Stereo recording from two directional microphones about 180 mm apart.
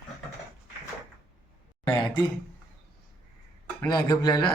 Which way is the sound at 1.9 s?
25° left (ahead or behind).